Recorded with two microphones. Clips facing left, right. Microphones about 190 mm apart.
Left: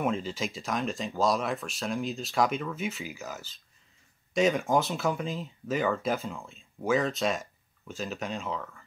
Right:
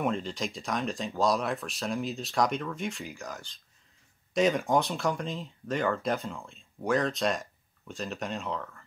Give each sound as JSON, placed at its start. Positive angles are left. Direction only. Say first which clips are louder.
{"t": 0.0, "sound": "speech", "louder": "left 1 dB", "side_deg": 5}